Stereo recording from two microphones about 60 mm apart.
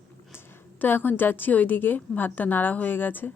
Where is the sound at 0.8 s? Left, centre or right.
Left.